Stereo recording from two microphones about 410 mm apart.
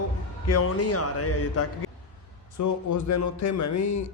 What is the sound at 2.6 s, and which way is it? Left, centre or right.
Speech, left.